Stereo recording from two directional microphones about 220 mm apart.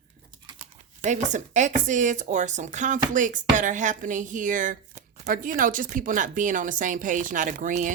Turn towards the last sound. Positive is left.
turn(degrees=-35)  # may be behind; listen again after turning